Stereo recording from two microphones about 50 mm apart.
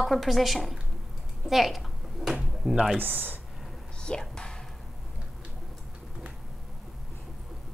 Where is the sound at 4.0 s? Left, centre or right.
Centre.